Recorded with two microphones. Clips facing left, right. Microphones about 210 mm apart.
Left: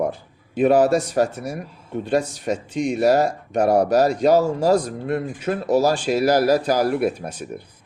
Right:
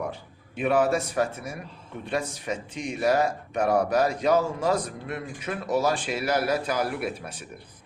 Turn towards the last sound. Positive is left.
turn(degrees=45)  # may be behind; listen again after turning